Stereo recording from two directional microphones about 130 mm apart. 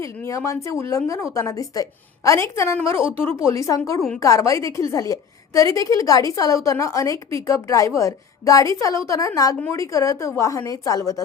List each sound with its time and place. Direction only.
0.0 s a woman's voice: 20° left (ahead or behind)